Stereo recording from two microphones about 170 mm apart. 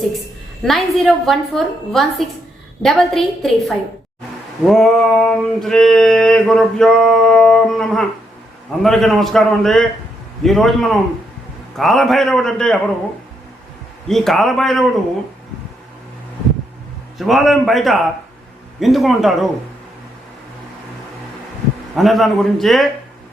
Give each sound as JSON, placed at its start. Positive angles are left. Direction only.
{"t": 0.6, "sound": "male singing", "side_deg": 0}
{"t": 14.1, "sound": "male singing", "side_deg": 0}
{"t": 17.2, "sound": "male singing", "side_deg": 0}
{"t": 21.9, "sound": "male singing", "side_deg": 0}